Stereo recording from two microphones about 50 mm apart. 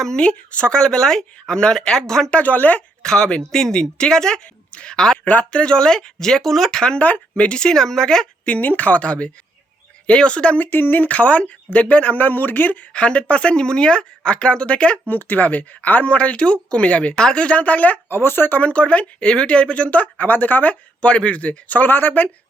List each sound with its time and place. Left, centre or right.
0.0 s speech: centre
2.3 s speech: left
3.0 s a man's voice: centre
5.2 s speech: left
5.5 s speech: centre
7.0 s speech: left
8.4 s speech: left
10.6 s speech: left
12.9 s speech: left
15.1 s speech: left
18.1 s speech: left
18.7 s speech: left
21.0 s speech: left